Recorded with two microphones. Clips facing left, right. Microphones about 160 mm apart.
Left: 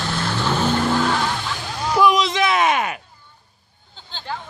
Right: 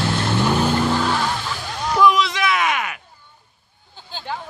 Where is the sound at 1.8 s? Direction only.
15° left (ahead or behind); by 3.0 s 30° left (ahead or behind).